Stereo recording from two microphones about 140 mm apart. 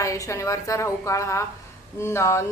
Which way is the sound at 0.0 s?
20° left (ahead or behind).